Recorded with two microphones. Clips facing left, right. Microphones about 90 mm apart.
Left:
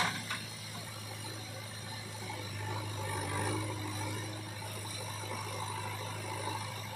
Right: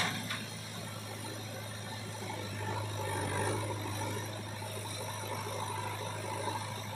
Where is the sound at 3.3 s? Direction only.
30° right (ahead or behind).